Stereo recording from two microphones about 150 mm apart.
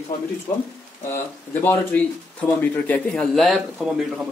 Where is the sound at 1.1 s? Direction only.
15° left (ahead or behind); by 4.0 s centre (ahead or behind).